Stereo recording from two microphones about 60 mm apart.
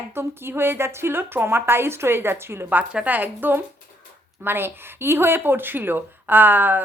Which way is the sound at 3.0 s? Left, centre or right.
Right.